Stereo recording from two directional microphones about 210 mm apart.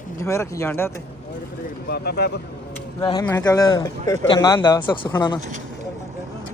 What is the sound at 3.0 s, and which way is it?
Speech, 20° left (ahead or behind).